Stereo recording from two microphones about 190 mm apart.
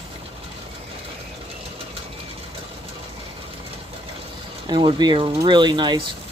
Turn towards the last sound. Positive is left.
turn(degrees=-25)  # may be behind; listen again after turning